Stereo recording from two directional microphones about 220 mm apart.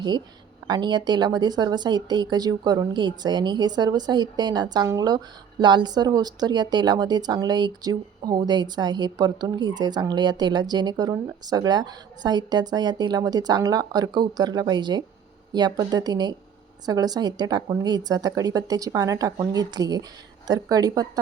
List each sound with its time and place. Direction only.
0.7 s speech: 20° right (ahead or behind)